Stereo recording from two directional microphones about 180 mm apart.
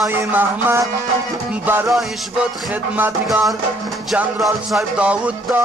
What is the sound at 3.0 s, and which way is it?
Music, 5° right (ahead or behind).